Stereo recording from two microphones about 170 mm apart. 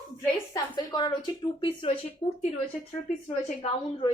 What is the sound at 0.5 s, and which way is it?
A woman's voice, 20° left (ahead or behind).